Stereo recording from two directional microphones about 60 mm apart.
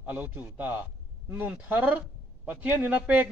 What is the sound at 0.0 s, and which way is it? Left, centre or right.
A man's voice, right.